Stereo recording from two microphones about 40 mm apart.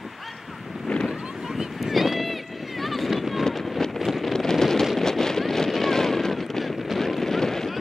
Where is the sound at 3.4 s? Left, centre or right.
Centre.